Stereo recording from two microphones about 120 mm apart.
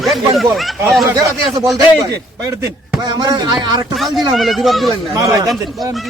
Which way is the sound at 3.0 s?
35° right (ahead or behind).